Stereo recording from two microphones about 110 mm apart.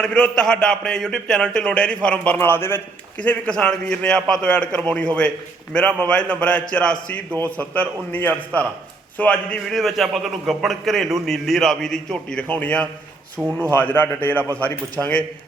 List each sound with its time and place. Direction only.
0.0 s a man's voice: 5° left (ahead or behind)
13.4 s speech: 10° right (ahead or behind)
13.7 s a man's voice: 15° left (ahead or behind)